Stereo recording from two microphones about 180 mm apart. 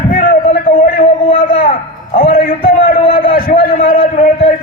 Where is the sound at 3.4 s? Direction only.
50° left (ahead or behind).